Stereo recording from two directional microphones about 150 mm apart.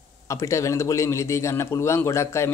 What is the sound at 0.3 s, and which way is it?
A man's voice, 20° left (ahead or behind).